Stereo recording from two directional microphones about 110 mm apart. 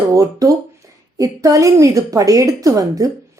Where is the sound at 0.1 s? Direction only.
30° right (ahead or behind).